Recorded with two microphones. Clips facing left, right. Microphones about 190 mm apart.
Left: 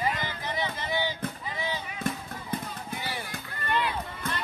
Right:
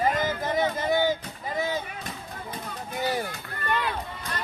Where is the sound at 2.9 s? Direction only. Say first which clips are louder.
Right 10 dB; 45° right (ahead or behind).